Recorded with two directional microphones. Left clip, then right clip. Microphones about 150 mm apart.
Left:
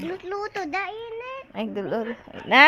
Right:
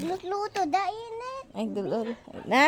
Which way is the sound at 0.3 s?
90° right.